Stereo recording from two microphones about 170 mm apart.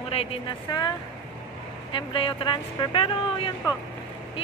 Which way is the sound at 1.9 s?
30° left (ahead or behind).